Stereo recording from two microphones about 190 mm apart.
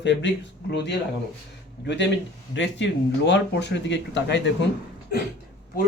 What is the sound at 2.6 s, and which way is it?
Speech, 70° left (ahead or behind).